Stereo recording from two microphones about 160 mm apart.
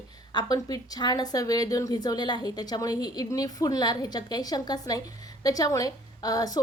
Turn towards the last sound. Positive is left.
turn(degrees=25)  # may be behind; listen again after turning